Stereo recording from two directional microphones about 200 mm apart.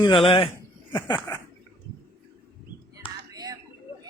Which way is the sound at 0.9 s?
15° left (ahead or behind).